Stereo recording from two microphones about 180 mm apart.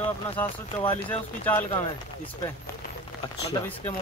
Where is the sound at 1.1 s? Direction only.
10° left (ahead or behind).